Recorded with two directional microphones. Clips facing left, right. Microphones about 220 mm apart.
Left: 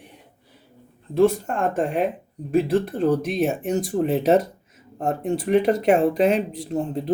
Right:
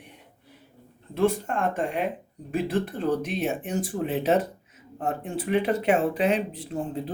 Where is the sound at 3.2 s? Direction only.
40° left (ahead or behind).